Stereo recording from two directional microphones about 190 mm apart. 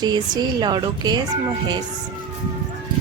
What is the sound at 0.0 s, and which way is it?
A woman's voice, 20° right (ahead or behind).